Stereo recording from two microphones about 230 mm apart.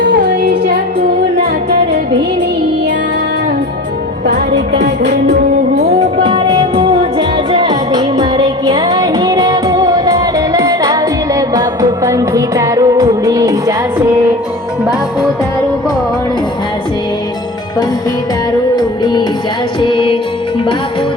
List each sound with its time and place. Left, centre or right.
0.0 s music: right
4.3 s music: right
6.2 s music: right
18.8 s music: centre